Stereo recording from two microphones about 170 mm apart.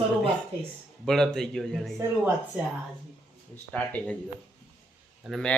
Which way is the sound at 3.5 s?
10° left (ahead or behind).